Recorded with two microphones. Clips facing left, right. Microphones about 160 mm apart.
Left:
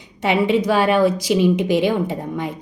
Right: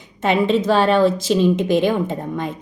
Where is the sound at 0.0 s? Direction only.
15° left (ahead or behind).